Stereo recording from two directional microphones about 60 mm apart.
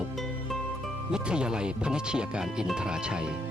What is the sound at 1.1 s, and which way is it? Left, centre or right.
Speech, centre.